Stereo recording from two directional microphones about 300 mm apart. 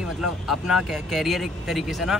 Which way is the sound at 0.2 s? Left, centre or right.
Centre.